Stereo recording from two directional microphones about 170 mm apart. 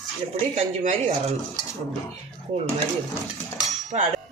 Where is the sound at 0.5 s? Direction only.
40° right (ahead or behind).